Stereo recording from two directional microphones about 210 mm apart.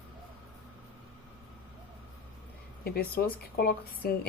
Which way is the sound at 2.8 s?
45° left (ahead or behind).